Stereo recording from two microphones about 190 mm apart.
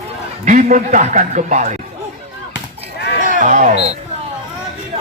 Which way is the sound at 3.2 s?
40° right (ahead or behind).